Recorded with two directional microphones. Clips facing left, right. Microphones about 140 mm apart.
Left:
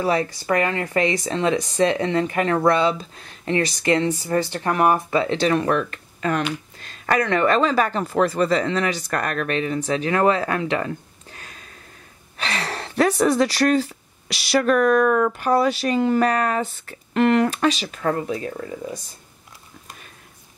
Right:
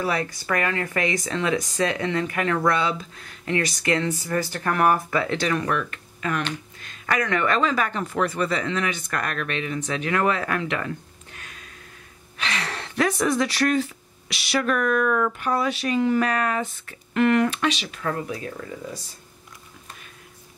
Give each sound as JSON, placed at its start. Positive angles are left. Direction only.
{"t": 0.0, "sound": "speech", "side_deg": 30}
{"t": 11.3, "sound": "a sound", "side_deg": 35}
{"t": 12.4, "sound": "speech", "side_deg": 35}